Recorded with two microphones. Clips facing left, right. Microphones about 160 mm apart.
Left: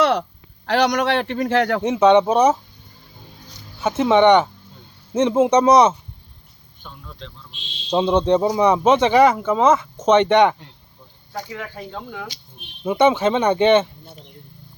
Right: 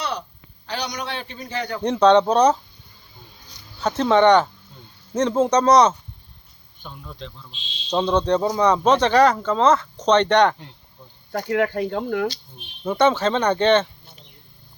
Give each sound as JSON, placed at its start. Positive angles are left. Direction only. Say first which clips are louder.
{"t": 0.0, "sound": "a man's voice", "louder": "left 11 dB", "side_deg": 85}
{"t": 1.8, "sound": "speech", "louder": "right 1 dB", "side_deg": 5}
{"t": 3.8, "sound": "speech", "louder": "left 2 dB", "side_deg": 10}
{"t": 6.8, "sound": "speech", "louder": "right 2 dB", "side_deg": -5}
{"t": 7.9, "sound": "speech", "louder": "left 3 dB", "side_deg": 10}
{"t": 11.3, "sound": "speech", "louder": "right 10 dB", "side_deg": -65}
{"t": 12.8, "sound": "speech", "louder": "left 2 dB", "side_deg": 10}